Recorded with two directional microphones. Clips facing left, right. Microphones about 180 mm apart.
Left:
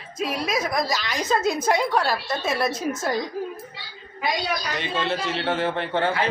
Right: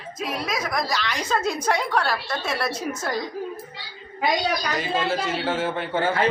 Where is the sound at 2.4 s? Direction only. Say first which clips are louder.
Left 3 dB; 20° left (ahead or behind).